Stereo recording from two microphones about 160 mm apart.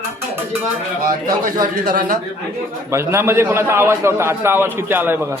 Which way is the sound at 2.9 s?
15° right (ahead or behind).